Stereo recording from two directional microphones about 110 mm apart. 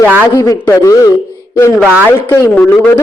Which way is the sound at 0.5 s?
25° left (ahead or behind).